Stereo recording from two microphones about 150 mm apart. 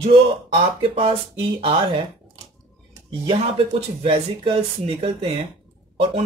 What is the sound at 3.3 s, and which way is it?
Speech, 40° right (ahead or behind).